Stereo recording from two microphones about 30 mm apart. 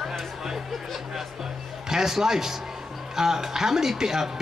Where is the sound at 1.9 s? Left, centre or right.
Centre.